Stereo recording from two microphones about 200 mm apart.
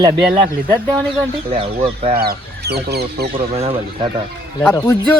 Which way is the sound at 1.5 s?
30° right (ahead or behind).